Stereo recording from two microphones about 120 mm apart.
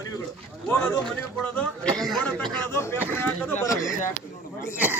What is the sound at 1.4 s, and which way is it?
Speech, 10° left (ahead or behind).